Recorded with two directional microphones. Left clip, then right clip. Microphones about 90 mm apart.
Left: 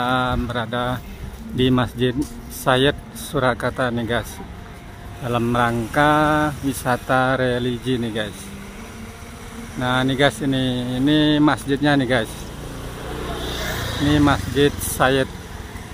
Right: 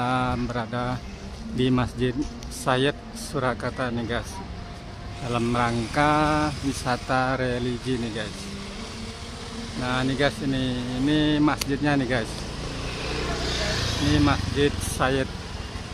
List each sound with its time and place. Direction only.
0.0 s speech: 30° left (ahead or behind); by 2.1 s 50° left (ahead or behind)
2.6 s a man's voice: 60° left (ahead or behind); by 4.2 s 85° left
5.3 s speech: 55° left (ahead or behind)
7.8 s speech: 90° left
10.5 s speech: 90° left; by 12.3 s 60° left (ahead or behind)
13.0 s vehicle: 25° left (ahead or behind); by 14.1 s 45° left (ahead or behind)
14.1 s speech: 80° left